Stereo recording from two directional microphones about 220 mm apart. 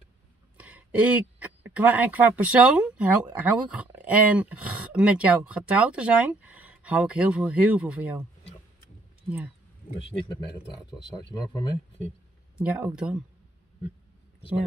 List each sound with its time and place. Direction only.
0.6 s speech: 5° right (ahead or behind)
9.9 s speech: 25° left (ahead or behind)
12.5 s speech: 5° right (ahead or behind)